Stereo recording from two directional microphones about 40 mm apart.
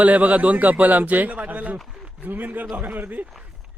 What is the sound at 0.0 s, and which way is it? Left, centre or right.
A man's voice, right.